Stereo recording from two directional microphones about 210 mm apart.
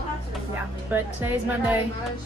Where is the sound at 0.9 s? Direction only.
10° right (ahead or behind).